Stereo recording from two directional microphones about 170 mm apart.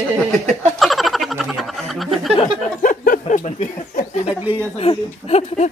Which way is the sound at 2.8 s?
50° left (ahead or behind).